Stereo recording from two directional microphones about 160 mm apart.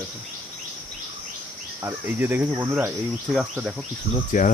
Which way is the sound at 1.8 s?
15° right (ahead or behind).